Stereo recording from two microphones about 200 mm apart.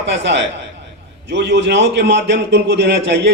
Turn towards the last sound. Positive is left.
turn(degrees=-60)  # may be behind; listen again after turning